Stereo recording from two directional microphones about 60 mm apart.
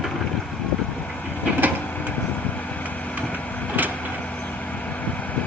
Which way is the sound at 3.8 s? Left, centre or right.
Right.